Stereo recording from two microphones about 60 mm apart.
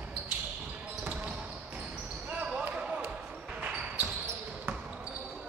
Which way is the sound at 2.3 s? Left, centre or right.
Right.